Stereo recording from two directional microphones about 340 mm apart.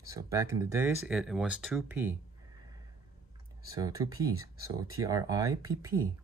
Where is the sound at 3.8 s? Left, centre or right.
Centre.